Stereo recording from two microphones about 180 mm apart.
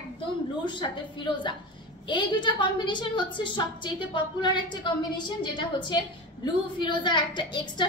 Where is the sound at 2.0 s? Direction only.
25° left (ahead or behind).